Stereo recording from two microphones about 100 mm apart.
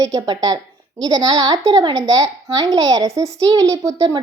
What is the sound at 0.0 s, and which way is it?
A woman's voice, 40° right (ahead or behind).